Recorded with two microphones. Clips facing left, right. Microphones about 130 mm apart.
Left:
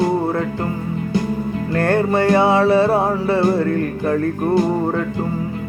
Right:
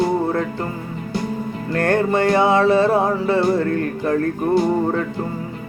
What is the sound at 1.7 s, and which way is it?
Music, 35° left (ahead or behind).